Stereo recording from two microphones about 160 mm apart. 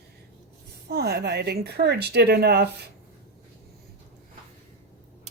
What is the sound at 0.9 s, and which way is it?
A woman's voice, 75° right (ahead or behind).